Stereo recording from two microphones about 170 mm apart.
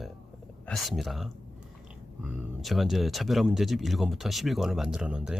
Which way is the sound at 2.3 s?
Centre (ahead or behind).